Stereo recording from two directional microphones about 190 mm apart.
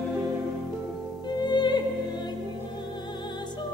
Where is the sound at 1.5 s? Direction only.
25° left (ahead or behind).